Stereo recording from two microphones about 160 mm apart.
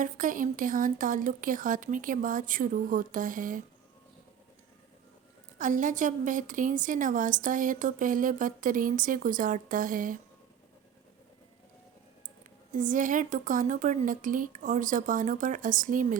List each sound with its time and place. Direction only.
0.0 s a woman's voice: 55° right (ahead or behind)
5.5 s a woman's voice: 50° right (ahead or behind)
12.7 s a woman's voice: 50° right (ahead or behind)